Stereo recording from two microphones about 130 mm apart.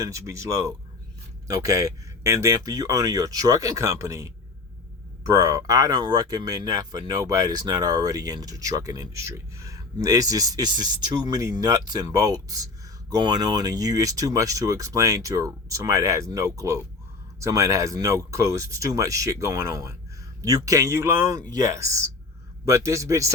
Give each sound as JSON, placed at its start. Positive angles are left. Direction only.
{"t": 0.0, "sound": "speech", "side_deg": -25}